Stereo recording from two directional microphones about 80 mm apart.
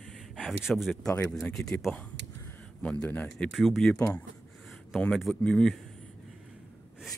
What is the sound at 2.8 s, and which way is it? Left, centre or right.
Speech, centre.